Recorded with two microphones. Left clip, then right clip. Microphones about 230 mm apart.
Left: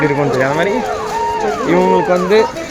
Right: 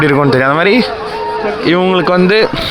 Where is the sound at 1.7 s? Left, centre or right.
Right.